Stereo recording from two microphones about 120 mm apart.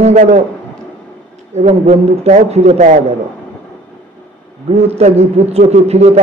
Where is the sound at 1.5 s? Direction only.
65° right (ahead or behind).